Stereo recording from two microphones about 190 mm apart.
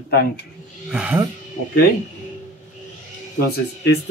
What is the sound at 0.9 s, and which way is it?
Speech, 5° right (ahead or behind).